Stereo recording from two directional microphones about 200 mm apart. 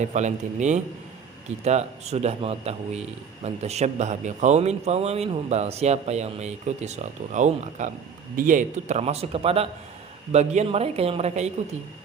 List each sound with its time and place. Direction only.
0.0 s a man's voice: 35° right (ahead or behind)